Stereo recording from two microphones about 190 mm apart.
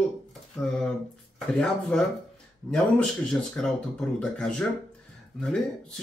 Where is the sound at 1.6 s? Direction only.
5° left (ahead or behind).